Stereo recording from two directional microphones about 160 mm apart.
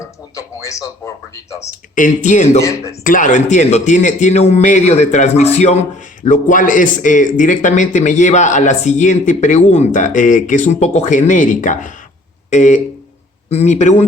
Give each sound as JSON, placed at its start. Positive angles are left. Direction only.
{"t": 0.0, "sound": "speech", "side_deg": 20}
{"t": 2.0, "sound": "a man's voice", "side_deg": 50}
{"t": 2.6, "sound": "speech", "side_deg": 20}
{"t": 3.0, "sound": "a man's voice", "side_deg": 55}
{"t": 6.2, "sound": "a man's voice", "side_deg": 55}